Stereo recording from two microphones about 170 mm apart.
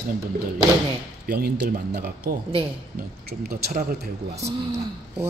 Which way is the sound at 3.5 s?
60° right (ahead or behind).